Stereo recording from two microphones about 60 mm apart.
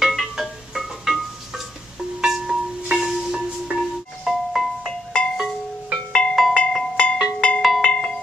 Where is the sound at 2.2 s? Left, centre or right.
Centre.